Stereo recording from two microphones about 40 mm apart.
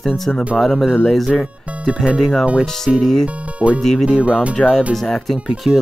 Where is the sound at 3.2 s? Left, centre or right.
Right.